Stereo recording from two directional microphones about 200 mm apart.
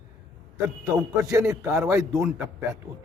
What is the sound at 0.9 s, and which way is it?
A man's voice, 15° right (ahead or behind).